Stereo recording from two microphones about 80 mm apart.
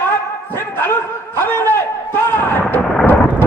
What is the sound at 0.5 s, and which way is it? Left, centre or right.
Dog, left.